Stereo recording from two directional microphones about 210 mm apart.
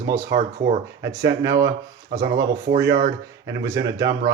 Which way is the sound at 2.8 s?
15° right (ahead or behind).